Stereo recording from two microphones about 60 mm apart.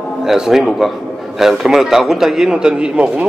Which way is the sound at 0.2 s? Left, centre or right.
Centre.